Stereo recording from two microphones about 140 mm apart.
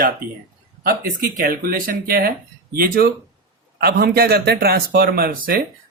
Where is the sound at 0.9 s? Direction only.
90° right.